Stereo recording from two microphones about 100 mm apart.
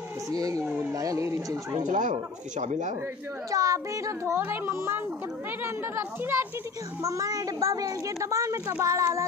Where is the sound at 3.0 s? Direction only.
20° right (ahead or behind).